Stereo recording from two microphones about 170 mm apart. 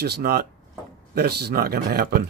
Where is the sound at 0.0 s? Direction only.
65° right (ahead or behind).